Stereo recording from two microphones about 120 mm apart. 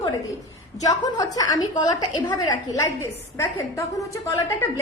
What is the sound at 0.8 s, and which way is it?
A woman's voice, 35° left (ahead or behind).